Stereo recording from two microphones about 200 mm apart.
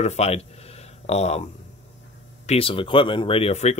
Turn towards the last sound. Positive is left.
turn(degrees=35)  # may be behind; listen again after turning